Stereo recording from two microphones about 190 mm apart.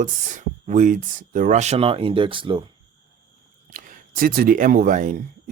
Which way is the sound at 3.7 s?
45° right (ahead or behind).